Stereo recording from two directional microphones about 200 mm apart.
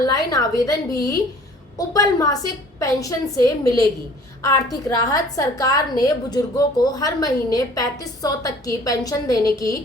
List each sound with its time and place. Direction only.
0.0 s a woman's voice: 20° left (ahead or behind)